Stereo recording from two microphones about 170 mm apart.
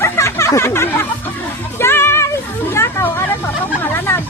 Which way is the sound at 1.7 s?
15° left (ahead or behind).